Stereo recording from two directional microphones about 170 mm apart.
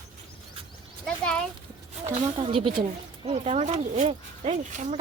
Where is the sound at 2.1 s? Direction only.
35° right (ahead or behind).